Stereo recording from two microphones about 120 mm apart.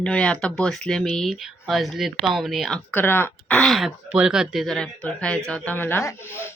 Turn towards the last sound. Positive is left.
turn(degrees=20)  # may be behind; listen again after turning